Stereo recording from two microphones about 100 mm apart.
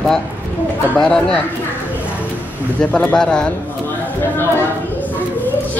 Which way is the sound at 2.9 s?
10° left (ahead or behind).